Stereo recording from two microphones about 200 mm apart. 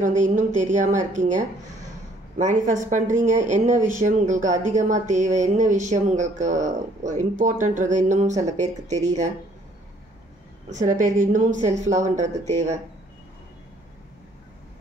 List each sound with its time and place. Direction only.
0.0 s speech: 40° right (ahead or behind)
10.7 s speech: 40° right (ahead or behind)